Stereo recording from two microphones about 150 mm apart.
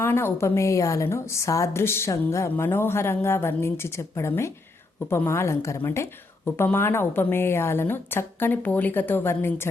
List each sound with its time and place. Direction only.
0.0 s a woman's voice: 15° left (ahead or behind)